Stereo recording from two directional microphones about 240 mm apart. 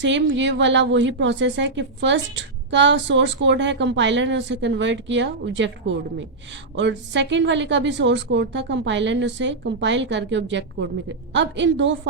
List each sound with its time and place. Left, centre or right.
0.0 s a woman's voice: right